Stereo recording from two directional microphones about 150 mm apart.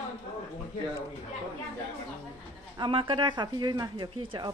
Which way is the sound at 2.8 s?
35° right (ahead or behind).